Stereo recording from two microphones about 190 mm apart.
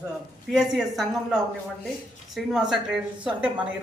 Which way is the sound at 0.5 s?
Centre (ahead or behind).